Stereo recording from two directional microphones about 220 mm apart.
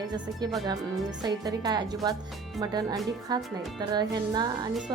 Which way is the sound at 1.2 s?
20° right (ahead or behind).